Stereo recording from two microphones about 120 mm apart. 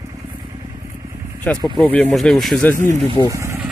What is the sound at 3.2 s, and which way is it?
Speech, 25° right (ahead or behind).